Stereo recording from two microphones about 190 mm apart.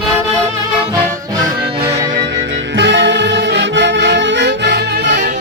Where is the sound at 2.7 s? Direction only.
65° right (ahead or behind).